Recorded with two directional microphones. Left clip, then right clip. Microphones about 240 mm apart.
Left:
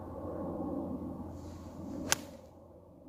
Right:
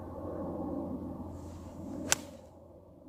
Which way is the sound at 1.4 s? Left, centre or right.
Centre.